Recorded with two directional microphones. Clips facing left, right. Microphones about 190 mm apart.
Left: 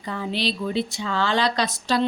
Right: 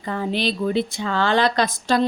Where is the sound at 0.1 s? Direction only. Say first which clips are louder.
Right 3 dB; 50° right (ahead or behind).